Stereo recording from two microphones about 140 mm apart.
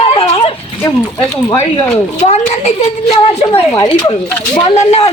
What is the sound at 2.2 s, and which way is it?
Speech, 50° left (ahead or behind).